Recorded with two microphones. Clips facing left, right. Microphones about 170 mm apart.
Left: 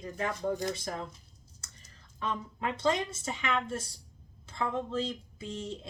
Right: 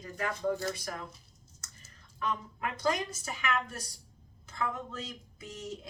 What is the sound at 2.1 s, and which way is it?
Speech, 25° left (ahead or behind).